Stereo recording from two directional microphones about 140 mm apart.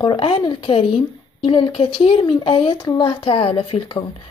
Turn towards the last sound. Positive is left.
turn(degrees=40)  # may be behind; listen again after turning